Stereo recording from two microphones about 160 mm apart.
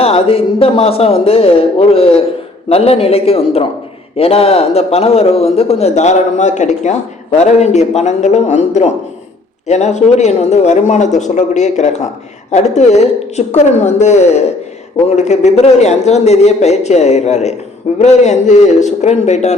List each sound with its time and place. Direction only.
0.0 s a man's voice: 35° left (ahead or behind)